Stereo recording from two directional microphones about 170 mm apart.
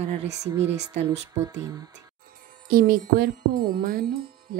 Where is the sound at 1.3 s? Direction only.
20° right (ahead or behind).